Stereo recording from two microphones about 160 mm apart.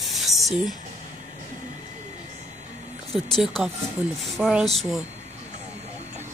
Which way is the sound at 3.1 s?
Centre (ahead or behind).